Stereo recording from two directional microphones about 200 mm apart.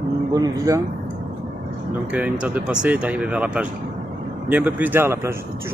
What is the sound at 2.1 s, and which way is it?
Speech, 5° right (ahead or behind).